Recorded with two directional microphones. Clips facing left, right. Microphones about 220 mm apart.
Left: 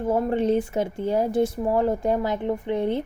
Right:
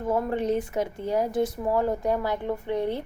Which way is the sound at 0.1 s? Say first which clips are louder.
Left 3 dB; 30° left (ahead or behind).